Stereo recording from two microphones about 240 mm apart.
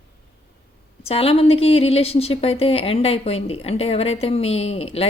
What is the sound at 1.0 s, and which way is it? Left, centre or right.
A woman's voice, left.